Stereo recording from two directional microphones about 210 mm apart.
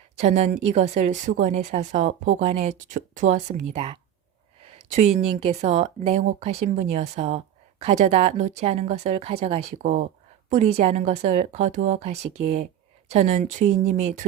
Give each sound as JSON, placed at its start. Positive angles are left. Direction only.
{"t": 0.2, "sound": "a woman's voice", "side_deg": -30}